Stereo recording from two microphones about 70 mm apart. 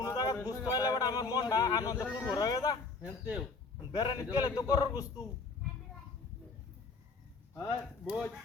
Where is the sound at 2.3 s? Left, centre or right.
Left.